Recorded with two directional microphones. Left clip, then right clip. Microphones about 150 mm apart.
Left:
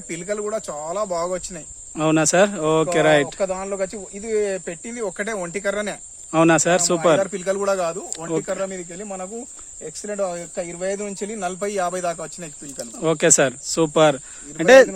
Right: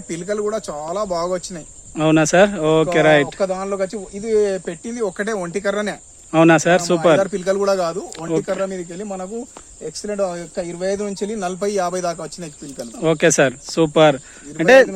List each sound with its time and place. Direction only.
0.1 s speech: 30° left (ahead or behind)
6.3 s speech: 15° left (ahead or behind)